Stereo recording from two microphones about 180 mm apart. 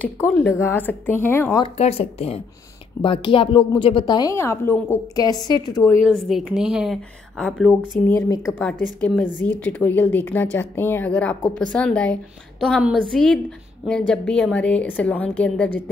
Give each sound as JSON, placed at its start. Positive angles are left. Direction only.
{"t": 0.0, "sound": "a woman's voice", "side_deg": 10}
{"t": 1.6, "sound": "a woman's voice", "side_deg": 35}
{"t": 6.0, "sound": "speech", "side_deg": 0}
{"t": 8.1, "sound": "a woman's voice", "side_deg": 15}